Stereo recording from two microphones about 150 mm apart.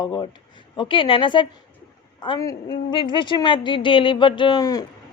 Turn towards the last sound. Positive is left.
turn(degrees=25)  # may be behind; listen again after turning